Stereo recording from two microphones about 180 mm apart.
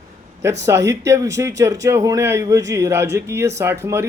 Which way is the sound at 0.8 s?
15° right (ahead or behind).